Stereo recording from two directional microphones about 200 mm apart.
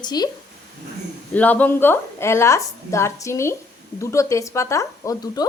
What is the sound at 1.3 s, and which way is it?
A woman's voice, 10° left (ahead or behind).